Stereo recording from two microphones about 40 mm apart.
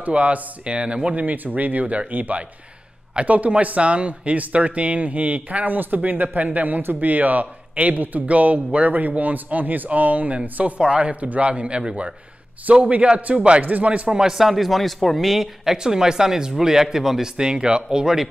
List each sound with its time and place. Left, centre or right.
0.0 s speech: right
1.1 s speech: right
13.6 s speech: right
14.3 s a man's voice: centre
15.4 s speech: centre
17.4 s speech: right